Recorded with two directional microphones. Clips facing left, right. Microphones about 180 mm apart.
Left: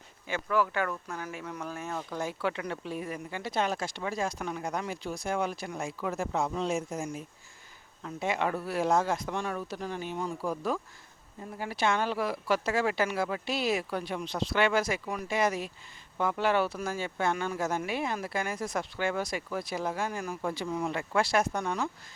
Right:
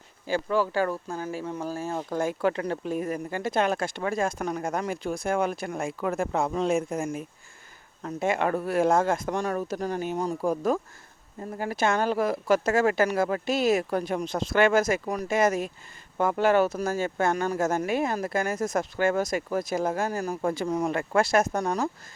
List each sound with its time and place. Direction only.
0.3 s speech: 30° right (ahead or behind)
2.1 s speech: 45° right (ahead or behind)